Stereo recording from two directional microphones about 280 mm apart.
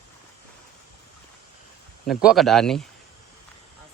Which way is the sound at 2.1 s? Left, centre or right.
Centre.